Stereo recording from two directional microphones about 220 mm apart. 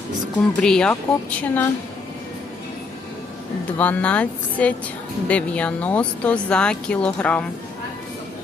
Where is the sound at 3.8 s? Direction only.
5° left (ahead or behind).